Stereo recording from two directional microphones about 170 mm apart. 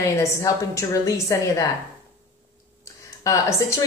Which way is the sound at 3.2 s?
20° left (ahead or behind).